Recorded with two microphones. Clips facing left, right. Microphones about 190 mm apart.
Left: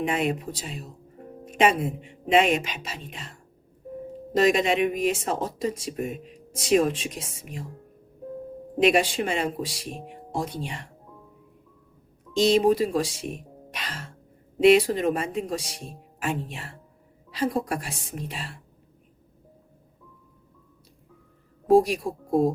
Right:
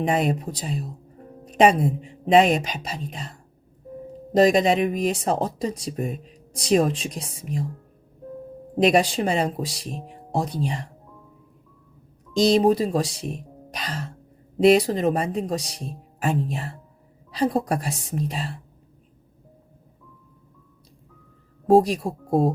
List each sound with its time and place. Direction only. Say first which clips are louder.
0.0 s speech: right 3 dB; 40° right (ahead or behind)
8.8 s speech: right 2 dB; 35° right (ahead or behind)
12.3 s speech: right 2 dB; 40° right (ahead or behind)